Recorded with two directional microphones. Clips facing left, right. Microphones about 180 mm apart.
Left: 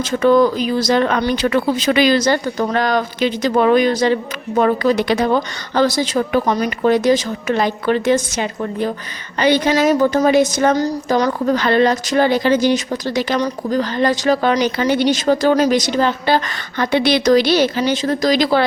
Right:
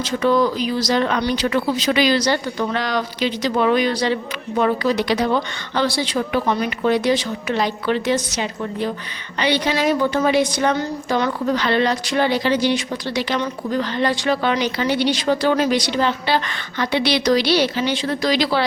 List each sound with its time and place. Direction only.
0.0 s a woman's voice: 50° left (ahead or behind)